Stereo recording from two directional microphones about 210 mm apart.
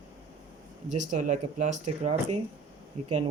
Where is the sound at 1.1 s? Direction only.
35° right (ahead or behind).